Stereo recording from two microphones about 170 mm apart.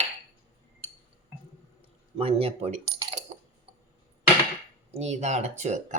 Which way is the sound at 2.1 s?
35° right (ahead or behind).